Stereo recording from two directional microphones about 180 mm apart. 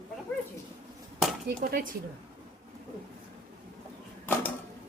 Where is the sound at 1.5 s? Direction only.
50° right (ahead or behind).